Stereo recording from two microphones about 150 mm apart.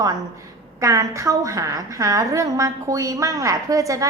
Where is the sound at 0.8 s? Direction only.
20° right (ahead or behind).